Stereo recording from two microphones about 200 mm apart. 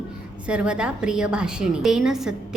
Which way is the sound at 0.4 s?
5° right (ahead or behind).